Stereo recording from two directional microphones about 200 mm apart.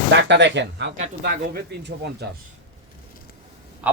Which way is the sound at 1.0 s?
50° right (ahead or behind).